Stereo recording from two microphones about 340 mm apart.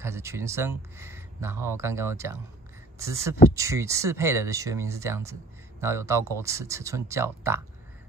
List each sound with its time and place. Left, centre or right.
0.0 s speech: centre